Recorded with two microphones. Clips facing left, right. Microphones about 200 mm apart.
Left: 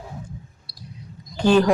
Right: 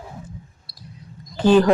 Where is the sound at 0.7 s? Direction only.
Centre (ahead or behind).